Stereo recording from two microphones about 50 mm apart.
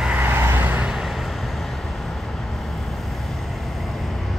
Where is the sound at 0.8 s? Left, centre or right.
Centre.